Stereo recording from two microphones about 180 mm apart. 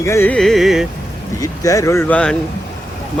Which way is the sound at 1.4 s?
20° left (ahead or behind).